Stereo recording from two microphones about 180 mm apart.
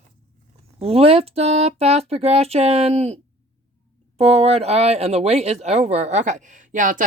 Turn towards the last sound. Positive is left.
turn(degrees=-45)  # may be behind; listen again after turning